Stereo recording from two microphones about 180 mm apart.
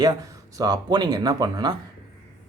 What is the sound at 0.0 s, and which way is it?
Speech, 20° right (ahead or behind).